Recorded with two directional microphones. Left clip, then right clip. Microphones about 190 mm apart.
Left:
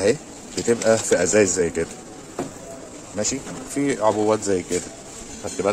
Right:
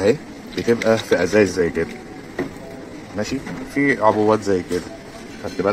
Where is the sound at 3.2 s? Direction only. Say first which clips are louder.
Right 1 dB; 15° left (ahead or behind).